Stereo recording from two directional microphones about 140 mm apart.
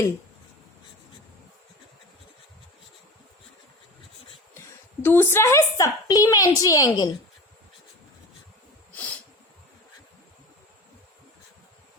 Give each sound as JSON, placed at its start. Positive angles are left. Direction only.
{"t": 5.0, "sound": "a woman's voice", "side_deg": 15}